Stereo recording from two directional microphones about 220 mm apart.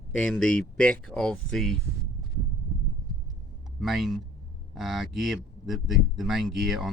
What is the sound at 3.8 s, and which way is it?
Speech, centre (ahead or behind).